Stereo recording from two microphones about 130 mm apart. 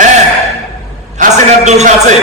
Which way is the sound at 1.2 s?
65° right (ahead or behind).